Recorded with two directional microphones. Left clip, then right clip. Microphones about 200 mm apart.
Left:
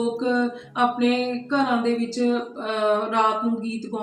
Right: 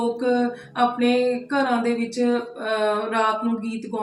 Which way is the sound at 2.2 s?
10° left (ahead or behind).